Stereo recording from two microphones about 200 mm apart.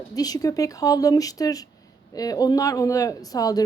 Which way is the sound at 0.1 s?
20° left (ahead or behind).